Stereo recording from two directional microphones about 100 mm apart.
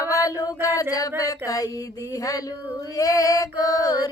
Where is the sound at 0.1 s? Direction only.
35° left (ahead or behind).